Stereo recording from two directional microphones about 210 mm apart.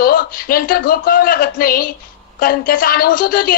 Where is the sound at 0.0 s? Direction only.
45° left (ahead or behind).